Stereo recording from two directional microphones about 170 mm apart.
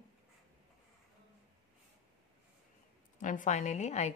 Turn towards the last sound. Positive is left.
turn(degrees=40)  # may be behind; listen again after turning